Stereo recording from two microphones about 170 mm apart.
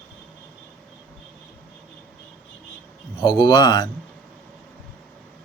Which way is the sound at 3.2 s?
25° left (ahead or behind).